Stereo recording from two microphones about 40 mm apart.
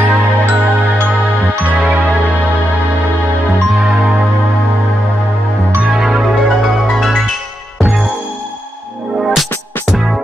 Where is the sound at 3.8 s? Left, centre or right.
Centre.